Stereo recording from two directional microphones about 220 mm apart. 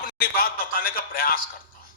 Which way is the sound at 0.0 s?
40° left (ahead or behind).